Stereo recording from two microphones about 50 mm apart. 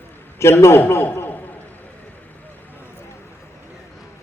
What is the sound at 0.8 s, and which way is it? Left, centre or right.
Speech, left.